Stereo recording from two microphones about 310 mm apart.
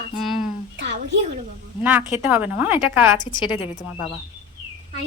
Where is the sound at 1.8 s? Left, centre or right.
Centre.